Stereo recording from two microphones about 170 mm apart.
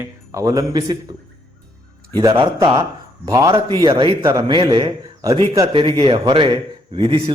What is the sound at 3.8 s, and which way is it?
A man's voice, 30° right (ahead or behind).